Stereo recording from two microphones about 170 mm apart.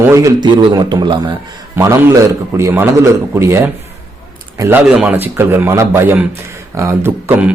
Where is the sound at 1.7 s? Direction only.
15° right (ahead or behind).